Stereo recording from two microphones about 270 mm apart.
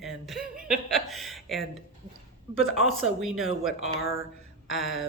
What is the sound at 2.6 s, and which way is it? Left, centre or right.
Speech, left.